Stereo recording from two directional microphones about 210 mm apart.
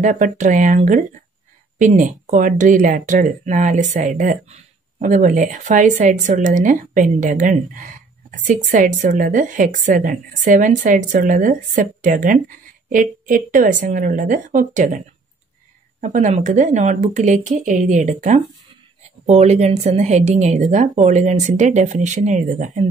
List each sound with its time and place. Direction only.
0.0 s a woman's voice: 35° right (ahead or behind)